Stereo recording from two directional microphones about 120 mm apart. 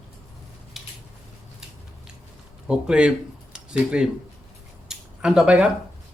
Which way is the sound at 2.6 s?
5° right (ahead or behind).